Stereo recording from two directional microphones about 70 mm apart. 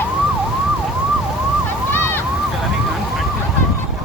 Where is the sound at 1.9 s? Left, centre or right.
Left.